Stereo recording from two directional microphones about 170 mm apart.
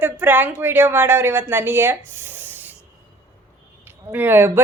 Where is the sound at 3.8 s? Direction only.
10° right (ahead or behind).